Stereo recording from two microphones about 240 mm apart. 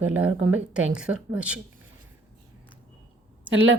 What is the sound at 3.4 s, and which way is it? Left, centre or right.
Speech, right.